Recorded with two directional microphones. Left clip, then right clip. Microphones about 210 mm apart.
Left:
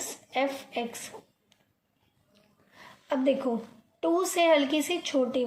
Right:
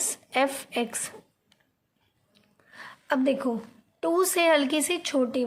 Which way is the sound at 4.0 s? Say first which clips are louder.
Right 2 dB; 35° right (ahead or behind).